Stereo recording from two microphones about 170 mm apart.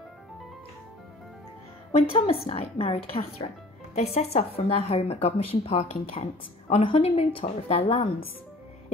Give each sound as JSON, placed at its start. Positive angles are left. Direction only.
{"t": 1.9, "sound": "a woman's voice", "side_deg": 35}